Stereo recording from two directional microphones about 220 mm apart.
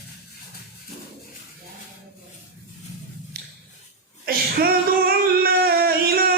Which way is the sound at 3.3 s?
45° right (ahead or behind).